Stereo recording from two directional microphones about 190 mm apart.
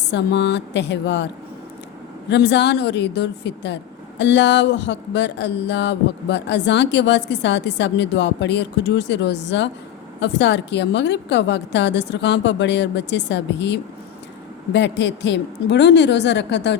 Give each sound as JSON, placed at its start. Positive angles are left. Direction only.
{"t": 0.1, "sound": "a woman's voice", "side_deg": 60}
{"t": 2.3, "sound": "a woman's voice", "side_deg": 65}
{"t": 4.2, "sound": "a sound", "side_deg": 65}